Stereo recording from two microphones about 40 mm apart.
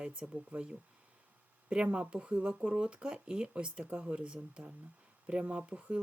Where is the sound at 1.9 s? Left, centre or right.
Right.